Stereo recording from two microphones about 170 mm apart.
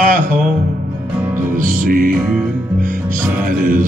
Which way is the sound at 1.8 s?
55° right (ahead or behind).